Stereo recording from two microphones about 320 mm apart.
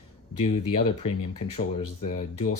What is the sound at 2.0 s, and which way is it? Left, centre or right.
Speech, left.